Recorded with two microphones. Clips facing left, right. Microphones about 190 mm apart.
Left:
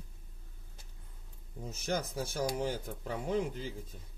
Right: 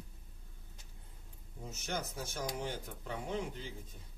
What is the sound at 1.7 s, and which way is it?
Speech, 35° left (ahead or behind).